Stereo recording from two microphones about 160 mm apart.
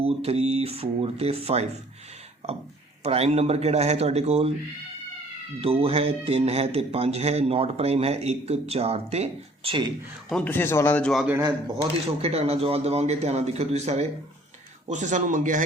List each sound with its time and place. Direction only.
0.0 s speech: 40° right (ahead or behind)
3.0 s speech: 40° right (ahead or behind)
5.5 s speech: 35° right (ahead or behind)
10.2 s speech: 5° left (ahead or behind)
11.3 s speech: 20° right (ahead or behind)
12.2 s speech: 40° right (ahead or behind)